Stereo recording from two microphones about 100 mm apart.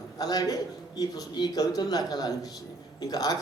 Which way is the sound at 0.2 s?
40° left (ahead or behind).